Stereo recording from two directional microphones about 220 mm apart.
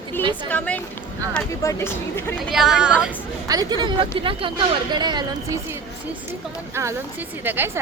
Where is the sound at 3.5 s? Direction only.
20° right (ahead or behind).